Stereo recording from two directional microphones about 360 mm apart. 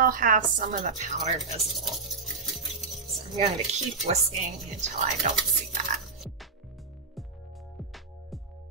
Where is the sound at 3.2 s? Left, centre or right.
Centre.